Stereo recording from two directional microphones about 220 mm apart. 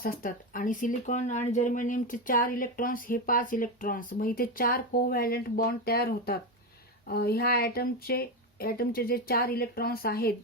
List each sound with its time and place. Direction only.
0.0 s speech: 40° left (ahead or behind)